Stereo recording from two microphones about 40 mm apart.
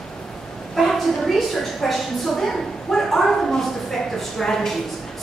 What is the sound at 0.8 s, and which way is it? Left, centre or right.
A woman's voice, centre.